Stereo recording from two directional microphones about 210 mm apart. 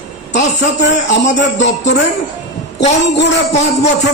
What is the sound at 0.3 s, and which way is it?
A man's voice, 60° left (ahead or behind).